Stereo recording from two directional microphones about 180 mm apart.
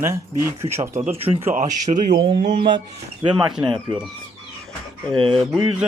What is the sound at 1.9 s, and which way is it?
Speech, 45° right (ahead or behind).